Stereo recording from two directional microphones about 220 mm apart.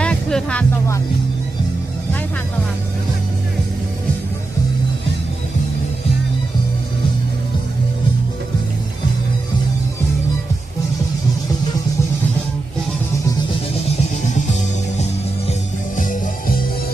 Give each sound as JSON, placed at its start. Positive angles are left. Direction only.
{"t": 0.0, "sound": "music", "side_deg": 5}
{"t": 14.3, "sound": "music", "side_deg": 30}